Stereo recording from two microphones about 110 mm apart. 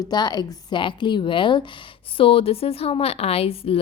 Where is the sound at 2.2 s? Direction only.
60° left (ahead or behind).